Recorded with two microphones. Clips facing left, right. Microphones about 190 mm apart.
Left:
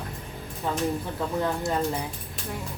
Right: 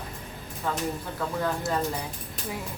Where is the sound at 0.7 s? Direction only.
20° left (ahead or behind).